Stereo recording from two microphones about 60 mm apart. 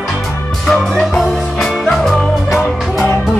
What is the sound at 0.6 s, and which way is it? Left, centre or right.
Music, centre.